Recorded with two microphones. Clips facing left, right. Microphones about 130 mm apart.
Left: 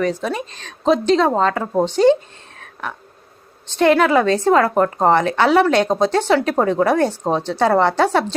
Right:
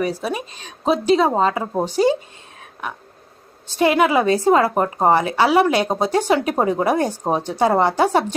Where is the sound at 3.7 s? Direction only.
10° right (ahead or behind).